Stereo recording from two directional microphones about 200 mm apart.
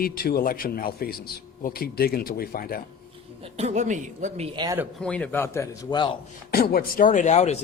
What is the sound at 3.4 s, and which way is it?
Speech, 30° right (ahead or behind).